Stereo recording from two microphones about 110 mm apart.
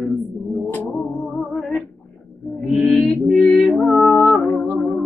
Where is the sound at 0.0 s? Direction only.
Centre (ahead or behind).